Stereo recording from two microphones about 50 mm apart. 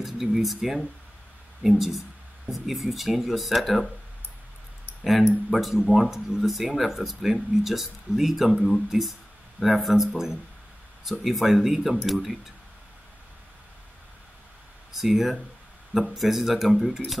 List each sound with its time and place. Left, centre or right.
0.0 s speech: centre
5.0 s speech: centre
14.9 s speech: centre